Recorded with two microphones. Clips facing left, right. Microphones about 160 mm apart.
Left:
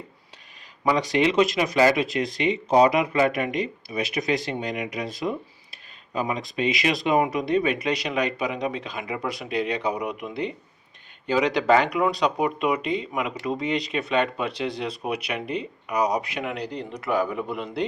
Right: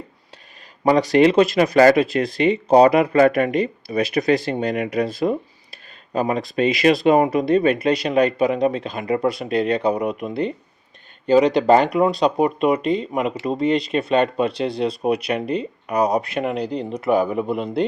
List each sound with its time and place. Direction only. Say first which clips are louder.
0.9 s speech: right 7 dB; 40° right (ahead or behind)